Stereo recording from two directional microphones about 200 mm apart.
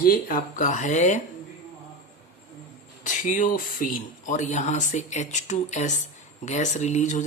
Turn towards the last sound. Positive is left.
turn(degrees=35)  # may be behind; listen again after turning